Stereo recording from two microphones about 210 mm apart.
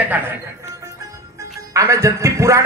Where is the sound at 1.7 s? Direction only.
15° right (ahead or behind).